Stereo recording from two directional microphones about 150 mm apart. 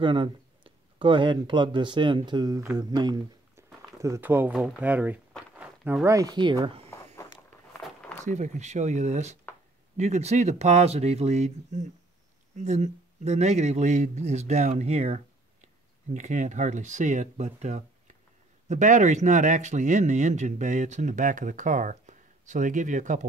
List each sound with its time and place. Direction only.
0.0 s speech: 35° right (ahead or behind)
3.5 s a sound: 20° right (ahead or behind)
4.6 s speech: 10° right (ahead or behind)
6.0 s speech: 25° right (ahead or behind)
7.7 s a sound: 10° left (ahead or behind)
8.3 s speech: 50° right (ahead or behind)